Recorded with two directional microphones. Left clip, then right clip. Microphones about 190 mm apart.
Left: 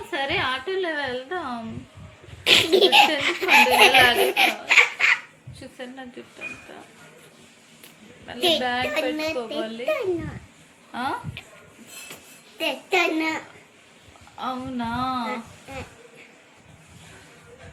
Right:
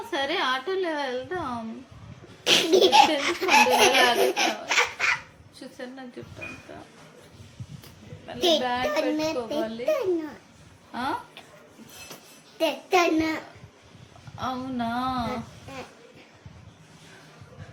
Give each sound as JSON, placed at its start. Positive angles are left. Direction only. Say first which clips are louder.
{"t": 0.1, "sound": "a woman's voice", "louder": "left 1 dB", "side_deg": -10}
{"t": 2.4, "sound": "a woman's voice", "louder": "left 3 dB", "side_deg": -10}
{"t": 5.5, "sound": "a sound", "louder": "left 1 dB", "side_deg": -5}
{"t": 8.4, "sound": "a woman's voice", "louder": "left 1 dB", "side_deg": -10}
{"t": 12.5, "sound": "child singing", "louder": "right 1 dB", "side_deg": -20}
{"t": 13.0, "sound": "a woman's voice", "louder": "even", "side_deg": -10}
{"t": 14.3, "sound": "a woman's voice", "louder": "left 1 dB", "side_deg": -10}